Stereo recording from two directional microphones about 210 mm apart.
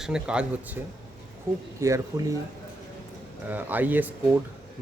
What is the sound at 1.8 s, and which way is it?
Speech, 15° right (ahead or behind).